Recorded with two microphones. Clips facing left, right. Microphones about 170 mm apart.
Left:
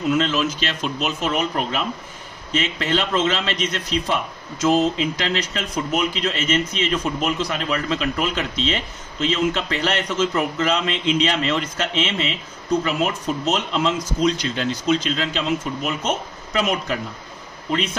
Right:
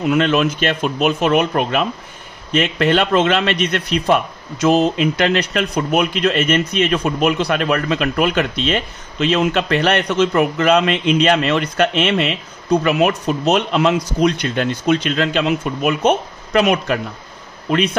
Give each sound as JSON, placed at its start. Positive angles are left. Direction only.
{"t": 0.1, "sound": "a man's voice", "side_deg": -60}